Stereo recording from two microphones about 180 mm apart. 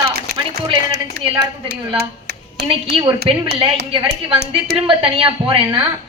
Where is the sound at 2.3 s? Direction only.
60° right (ahead or behind).